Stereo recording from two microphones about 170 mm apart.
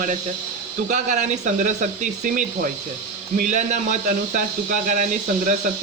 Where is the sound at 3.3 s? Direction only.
45° right (ahead or behind).